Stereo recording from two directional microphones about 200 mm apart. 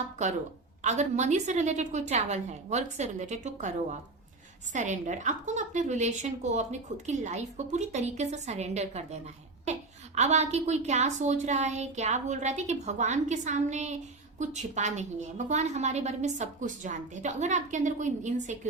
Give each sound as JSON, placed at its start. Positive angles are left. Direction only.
{"t": 0.8, "sound": "a woman's voice", "side_deg": -35}
{"t": 10.2, "sound": "a woman's voice", "side_deg": -35}